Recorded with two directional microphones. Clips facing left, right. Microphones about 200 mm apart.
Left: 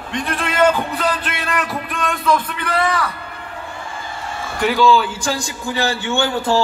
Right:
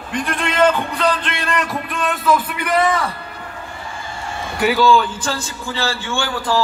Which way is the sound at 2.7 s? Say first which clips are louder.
Right 2 dB; 20° right (ahead or behind).